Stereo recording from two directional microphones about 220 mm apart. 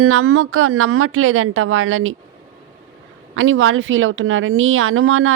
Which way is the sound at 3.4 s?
65° right (ahead or behind).